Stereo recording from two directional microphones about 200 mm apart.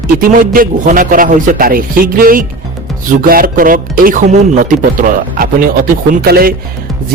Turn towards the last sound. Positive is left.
turn(degrees=-50)  # may be behind; listen again after turning